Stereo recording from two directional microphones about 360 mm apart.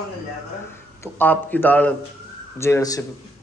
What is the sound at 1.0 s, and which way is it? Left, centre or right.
A man's voice, centre.